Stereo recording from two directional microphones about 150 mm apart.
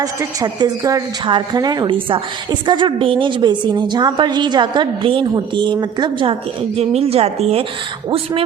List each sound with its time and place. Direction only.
0.0 s a woman's voice: 25° right (ahead or behind)
6.7 s a woman's voice: 40° right (ahead or behind)